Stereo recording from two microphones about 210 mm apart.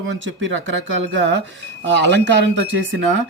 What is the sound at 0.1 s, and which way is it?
Speech, 60° right (ahead or behind).